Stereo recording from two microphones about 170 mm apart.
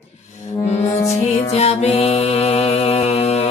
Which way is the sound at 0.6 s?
40° left (ahead or behind).